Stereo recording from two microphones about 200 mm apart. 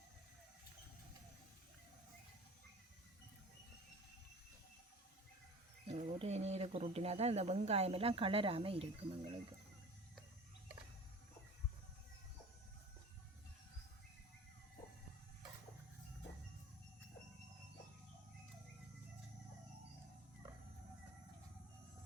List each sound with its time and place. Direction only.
5.9 s speech: 30° right (ahead or behind)